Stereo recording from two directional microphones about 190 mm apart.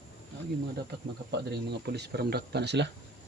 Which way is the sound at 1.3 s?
60° right (ahead or behind).